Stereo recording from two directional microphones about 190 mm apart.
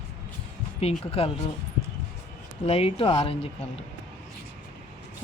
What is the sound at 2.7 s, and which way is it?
Speech, 30° left (ahead or behind).